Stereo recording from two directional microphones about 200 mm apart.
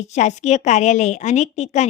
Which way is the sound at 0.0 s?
35° left (ahead or behind).